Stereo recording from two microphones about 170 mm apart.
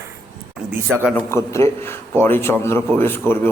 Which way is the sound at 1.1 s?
15° left (ahead or behind).